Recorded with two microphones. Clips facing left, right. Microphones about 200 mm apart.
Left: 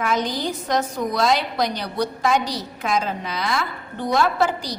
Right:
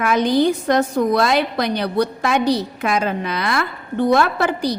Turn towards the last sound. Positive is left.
turn(degrees=-60)  # may be behind; listen again after turning